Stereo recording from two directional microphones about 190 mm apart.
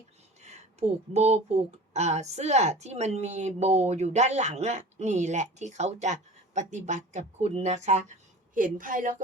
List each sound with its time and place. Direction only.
0.4 s a woman's voice: 35° right (ahead or behind)